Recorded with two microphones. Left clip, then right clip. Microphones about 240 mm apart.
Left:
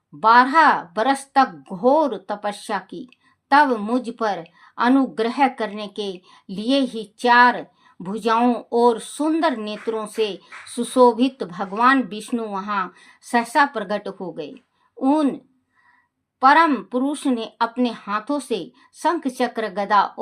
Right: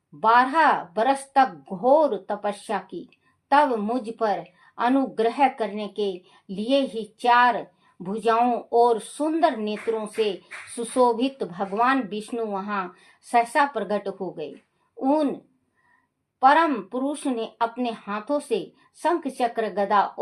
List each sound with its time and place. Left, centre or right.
0.2 s a woman's voice: left
16.4 s a woman's voice: left